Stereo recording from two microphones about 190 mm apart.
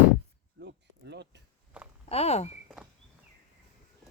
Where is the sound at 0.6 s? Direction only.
60° right (ahead or behind).